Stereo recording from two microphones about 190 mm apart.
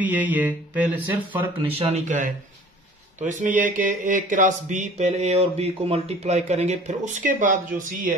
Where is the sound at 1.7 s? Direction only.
35° right (ahead or behind).